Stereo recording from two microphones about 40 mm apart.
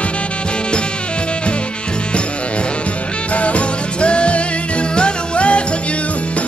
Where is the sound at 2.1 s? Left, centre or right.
Left.